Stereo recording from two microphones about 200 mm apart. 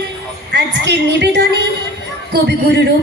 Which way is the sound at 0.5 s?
60° right (ahead or behind).